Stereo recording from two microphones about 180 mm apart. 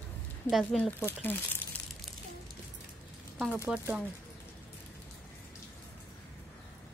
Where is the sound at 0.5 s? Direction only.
Centre (ahead or behind).